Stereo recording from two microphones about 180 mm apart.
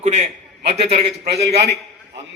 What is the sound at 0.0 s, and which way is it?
A man's voice, 40° right (ahead or behind).